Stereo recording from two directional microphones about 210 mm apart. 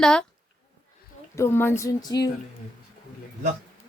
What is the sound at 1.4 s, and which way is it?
Speech, 10° left (ahead or behind).